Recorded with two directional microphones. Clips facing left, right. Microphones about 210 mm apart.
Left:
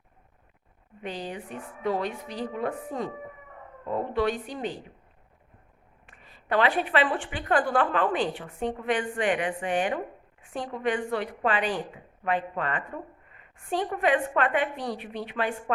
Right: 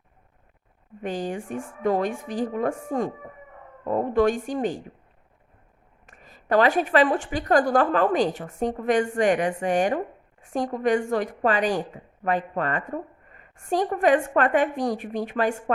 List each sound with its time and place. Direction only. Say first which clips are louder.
1.0 s a woman's voice: right 6 dB; 45° right (ahead or behind)
6.1 s a woman's voice: right 5 dB; 45° right (ahead or behind)